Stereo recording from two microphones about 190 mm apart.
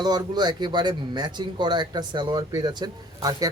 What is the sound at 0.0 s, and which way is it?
Speech, 20° right (ahead or behind).